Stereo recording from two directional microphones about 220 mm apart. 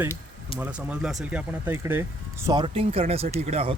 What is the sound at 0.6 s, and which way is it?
Speech, 5° right (ahead or behind).